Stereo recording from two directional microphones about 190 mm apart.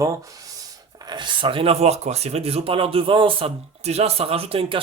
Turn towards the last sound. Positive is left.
turn(degrees=-30)  # may be behind; listen again after turning